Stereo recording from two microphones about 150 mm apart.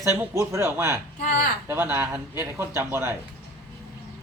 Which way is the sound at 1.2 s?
60° left (ahead or behind).